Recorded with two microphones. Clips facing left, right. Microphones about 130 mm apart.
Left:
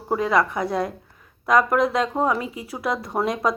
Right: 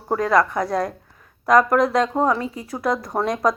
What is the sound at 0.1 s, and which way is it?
Speech, 5° left (ahead or behind).